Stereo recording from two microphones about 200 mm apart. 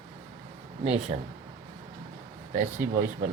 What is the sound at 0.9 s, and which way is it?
Speech, 35° right (ahead or behind).